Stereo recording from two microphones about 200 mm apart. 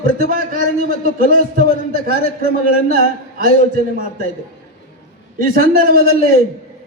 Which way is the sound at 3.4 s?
45° right (ahead or behind).